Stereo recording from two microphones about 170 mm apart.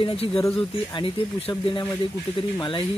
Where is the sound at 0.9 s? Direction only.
30° left (ahead or behind).